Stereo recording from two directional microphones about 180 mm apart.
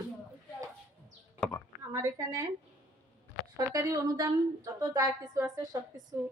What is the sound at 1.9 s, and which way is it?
Speech, 20° right (ahead or behind).